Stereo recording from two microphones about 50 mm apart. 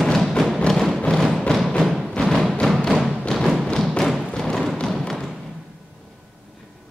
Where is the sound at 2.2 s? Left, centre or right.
Left.